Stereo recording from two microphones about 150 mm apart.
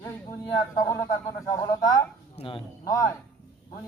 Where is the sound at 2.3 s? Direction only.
35° left (ahead or behind).